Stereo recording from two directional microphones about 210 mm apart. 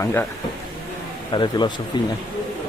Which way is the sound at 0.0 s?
10° left (ahead or behind).